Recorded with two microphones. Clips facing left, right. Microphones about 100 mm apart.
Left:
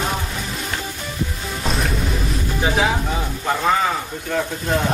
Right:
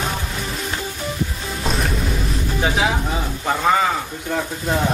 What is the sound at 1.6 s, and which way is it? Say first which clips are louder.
Music: even; centre (ahead or behind).